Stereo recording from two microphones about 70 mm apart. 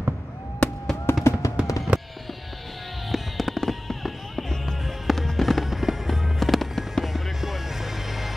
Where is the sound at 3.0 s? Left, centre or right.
Centre.